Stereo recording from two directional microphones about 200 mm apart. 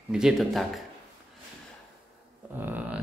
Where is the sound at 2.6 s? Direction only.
10° right (ahead or behind).